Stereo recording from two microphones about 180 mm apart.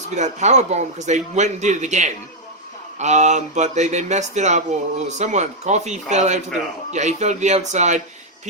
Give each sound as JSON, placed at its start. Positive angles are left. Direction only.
{"t": 0.1, "sound": "a man's voice", "side_deg": -40}